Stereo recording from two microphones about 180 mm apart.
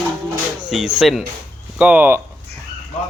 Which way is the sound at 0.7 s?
5° right (ahead or behind).